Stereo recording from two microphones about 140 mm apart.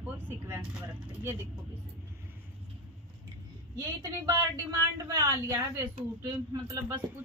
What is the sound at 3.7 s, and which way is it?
Speech, 20° right (ahead or behind).